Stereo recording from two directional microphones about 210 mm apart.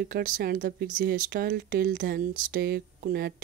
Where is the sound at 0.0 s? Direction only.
45° right (ahead or behind).